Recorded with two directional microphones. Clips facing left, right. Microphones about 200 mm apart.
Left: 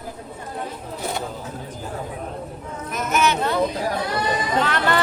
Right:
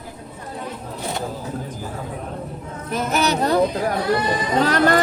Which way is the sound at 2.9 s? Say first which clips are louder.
Right 1 dB; 35° right (ahead or behind).